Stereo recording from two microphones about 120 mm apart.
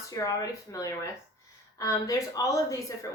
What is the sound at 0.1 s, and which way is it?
Speech, 30° left (ahead or behind).